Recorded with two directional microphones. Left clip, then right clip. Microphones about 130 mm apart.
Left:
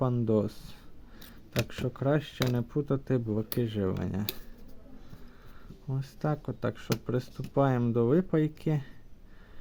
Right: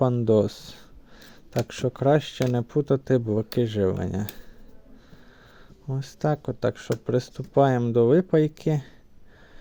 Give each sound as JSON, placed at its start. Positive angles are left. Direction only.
{"t": 0.3, "sound": "speech", "side_deg": -40}
{"t": 5.9, "sound": "speech", "side_deg": -35}
{"t": 7.8, "sound": "speech", "side_deg": -25}
{"t": 8.0, "sound": "speech", "side_deg": -35}